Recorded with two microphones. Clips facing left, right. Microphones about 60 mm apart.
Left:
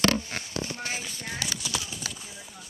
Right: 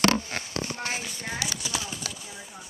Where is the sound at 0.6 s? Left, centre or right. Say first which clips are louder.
Right 1 dB; right.